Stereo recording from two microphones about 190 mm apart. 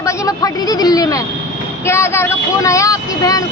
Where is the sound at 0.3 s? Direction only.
20° left (ahead or behind).